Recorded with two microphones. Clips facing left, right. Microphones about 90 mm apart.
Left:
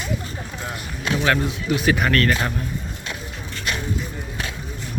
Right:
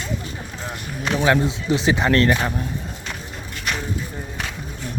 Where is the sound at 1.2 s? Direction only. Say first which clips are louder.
Right 3 dB; 20° right (ahead or behind).